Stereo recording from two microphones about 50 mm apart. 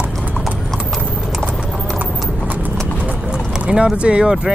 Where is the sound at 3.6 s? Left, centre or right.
Centre.